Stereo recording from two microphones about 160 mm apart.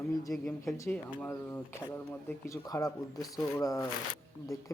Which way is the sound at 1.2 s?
15° left (ahead or behind).